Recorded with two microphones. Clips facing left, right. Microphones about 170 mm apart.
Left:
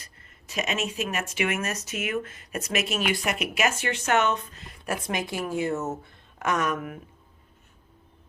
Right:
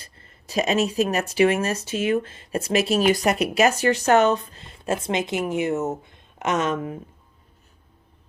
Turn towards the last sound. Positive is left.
turn(degrees=-25)  # may be behind; listen again after turning